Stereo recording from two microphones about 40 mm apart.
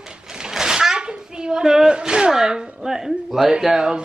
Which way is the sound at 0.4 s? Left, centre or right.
Centre.